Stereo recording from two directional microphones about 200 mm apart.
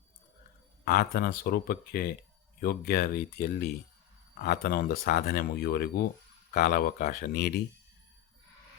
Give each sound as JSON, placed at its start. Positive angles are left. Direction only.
{"t": 0.9, "sound": "speech", "side_deg": 50}